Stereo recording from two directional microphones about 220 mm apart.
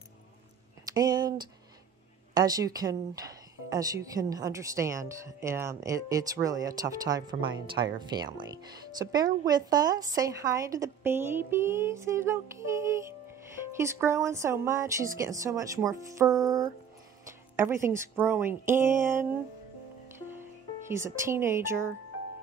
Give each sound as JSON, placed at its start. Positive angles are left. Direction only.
{"t": 0.9, "sound": "speech", "side_deg": -20}
{"t": 2.3, "sound": "speech", "side_deg": -15}
{"t": 20.2, "sound": "music", "side_deg": -10}
{"t": 21.2, "sound": "speech", "side_deg": -10}